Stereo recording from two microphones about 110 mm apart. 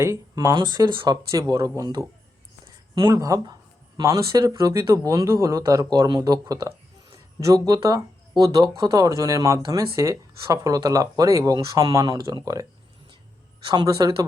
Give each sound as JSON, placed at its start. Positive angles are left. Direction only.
{"t": 0.0, "sound": "speech", "side_deg": -30}
{"t": 0.5, "sound": "speech", "side_deg": -40}
{"t": 3.1, "sound": "speech", "side_deg": -30}
{"t": 13.7, "sound": "speech", "side_deg": -35}